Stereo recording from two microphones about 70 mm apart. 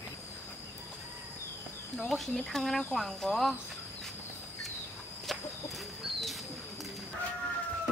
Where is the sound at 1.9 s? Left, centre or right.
Centre.